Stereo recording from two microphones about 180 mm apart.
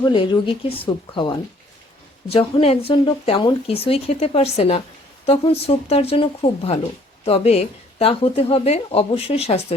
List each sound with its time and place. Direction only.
0.0 s speech: 25° left (ahead or behind)